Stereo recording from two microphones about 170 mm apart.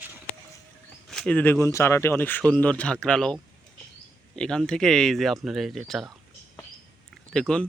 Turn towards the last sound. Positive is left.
turn(degrees=5)  # may be behind; listen again after turning